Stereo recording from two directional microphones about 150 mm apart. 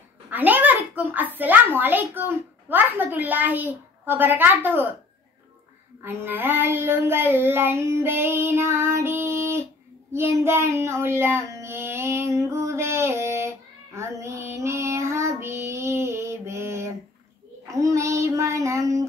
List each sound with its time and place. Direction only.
0.3 s a child's voice: 10° right (ahead or behind)
6.0 s child singing: 15° right (ahead or behind)